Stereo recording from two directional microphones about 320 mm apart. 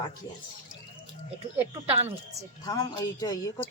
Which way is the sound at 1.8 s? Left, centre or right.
Centre.